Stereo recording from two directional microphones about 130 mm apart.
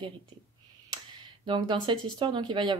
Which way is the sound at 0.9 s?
40° right (ahead or behind).